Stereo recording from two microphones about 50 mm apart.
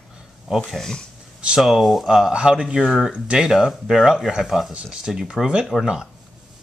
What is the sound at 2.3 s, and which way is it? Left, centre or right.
A child's voice, centre.